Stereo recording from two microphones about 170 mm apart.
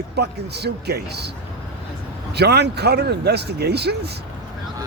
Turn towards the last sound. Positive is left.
turn(degrees=-75)  # may be behind; listen again after turning